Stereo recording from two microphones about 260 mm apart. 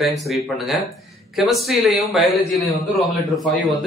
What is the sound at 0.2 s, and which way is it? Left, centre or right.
A man's voice, centre.